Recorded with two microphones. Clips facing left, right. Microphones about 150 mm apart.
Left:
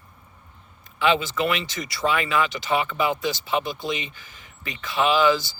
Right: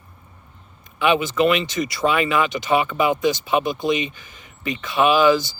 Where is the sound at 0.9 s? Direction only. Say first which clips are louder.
Right 4 dB; 20° right (ahead or behind).